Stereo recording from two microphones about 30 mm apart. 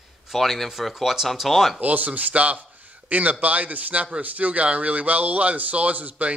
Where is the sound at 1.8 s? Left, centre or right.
Right.